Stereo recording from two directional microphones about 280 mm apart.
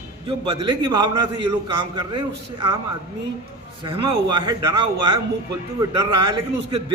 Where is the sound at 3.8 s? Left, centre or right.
Centre.